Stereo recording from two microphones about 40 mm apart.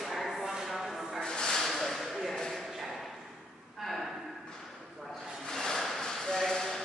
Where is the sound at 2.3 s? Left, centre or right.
Centre.